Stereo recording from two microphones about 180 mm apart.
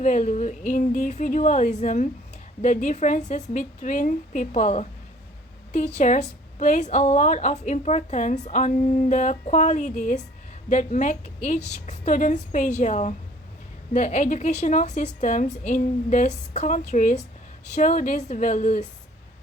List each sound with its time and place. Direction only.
0.0 s a woman's voice: 45° left (ahead or behind)